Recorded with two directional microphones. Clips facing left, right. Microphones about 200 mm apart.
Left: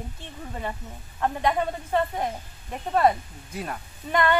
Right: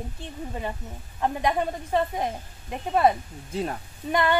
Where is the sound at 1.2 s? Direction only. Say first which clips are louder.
Even; 15° right (ahead or behind).